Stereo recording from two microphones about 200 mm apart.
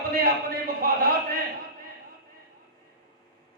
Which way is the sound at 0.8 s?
50° right (ahead or behind).